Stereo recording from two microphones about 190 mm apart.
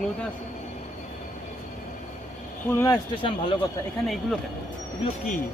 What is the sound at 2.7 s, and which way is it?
Speech, 15° left (ahead or behind).